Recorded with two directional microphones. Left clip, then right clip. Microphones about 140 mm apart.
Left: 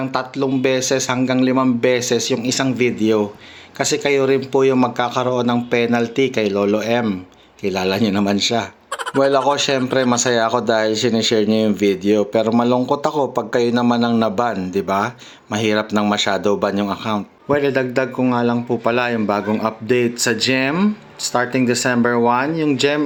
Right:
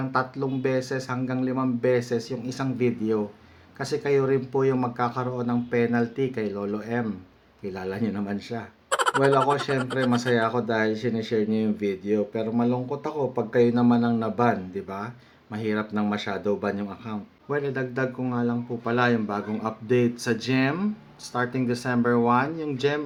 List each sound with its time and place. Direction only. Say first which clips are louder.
0.1 s speech: left 3 dB; 20° left (ahead or behind)
8.9 s a sound: left 1 dB; centre (ahead or behind)
9.5 s speech: left 8 dB; 25° left (ahead or behind)